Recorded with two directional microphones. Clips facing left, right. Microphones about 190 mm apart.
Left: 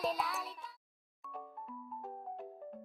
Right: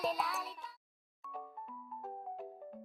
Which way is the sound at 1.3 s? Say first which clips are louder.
Even; centre (ahead or behind).